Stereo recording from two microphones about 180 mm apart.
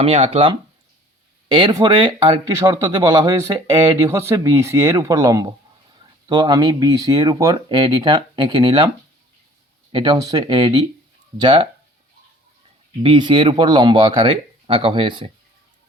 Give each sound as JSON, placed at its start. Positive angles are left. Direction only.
{"t": 0.0, "sound": "speech", "side_deg": -30}
{"t": 9.9, "sound": "speech", "side_deg": -25}
{"t": 13.0, "sound": "speech", "side_deg": -30}